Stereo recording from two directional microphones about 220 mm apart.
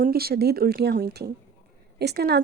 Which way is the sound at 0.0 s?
45° right (ahead or behind).